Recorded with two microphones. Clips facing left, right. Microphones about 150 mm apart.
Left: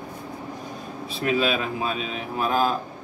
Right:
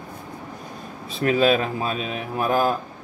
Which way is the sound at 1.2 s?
40° right (ahead or behind).